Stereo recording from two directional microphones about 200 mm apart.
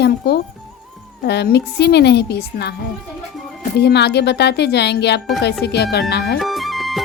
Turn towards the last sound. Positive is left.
turn(degrees=0)  # may be behind; listen again after turning